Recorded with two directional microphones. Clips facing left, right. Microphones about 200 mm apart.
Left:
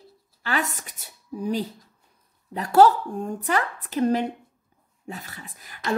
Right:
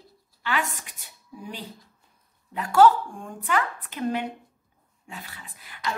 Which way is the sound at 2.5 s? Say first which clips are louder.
Left 1 dB; 40° left (ahead or behind).